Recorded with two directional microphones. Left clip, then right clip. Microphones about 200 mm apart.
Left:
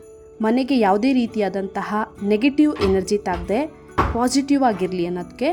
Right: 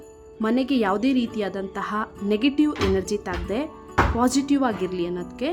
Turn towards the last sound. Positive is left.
turn(degrees=15)  # may be behind; listen again after turning